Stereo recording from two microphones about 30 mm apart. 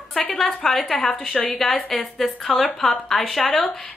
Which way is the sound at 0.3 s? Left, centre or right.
Centre.